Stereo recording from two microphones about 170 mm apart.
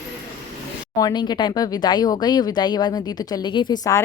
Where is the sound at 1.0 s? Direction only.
25° left (ahead or behind).